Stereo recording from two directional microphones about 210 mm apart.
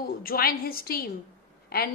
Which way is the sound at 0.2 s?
45° left (ahead or behind).